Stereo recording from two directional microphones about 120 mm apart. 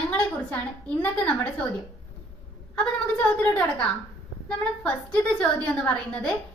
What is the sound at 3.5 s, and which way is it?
A woman's voice, 10° left (ahead or behind).